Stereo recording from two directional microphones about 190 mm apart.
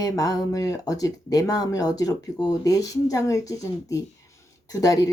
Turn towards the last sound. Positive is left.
turn(degrees=20)  # may be behind; listen again after turning